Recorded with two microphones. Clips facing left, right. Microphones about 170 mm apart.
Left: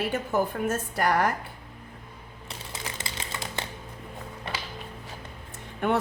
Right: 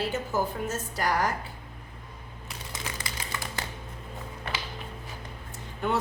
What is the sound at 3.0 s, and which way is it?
Crumpling, 25° left (ahead or behind).